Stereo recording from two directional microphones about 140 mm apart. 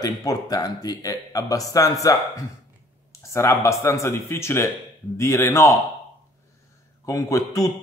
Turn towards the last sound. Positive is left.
turn(degrees=25)  # may be behind; listen again after turning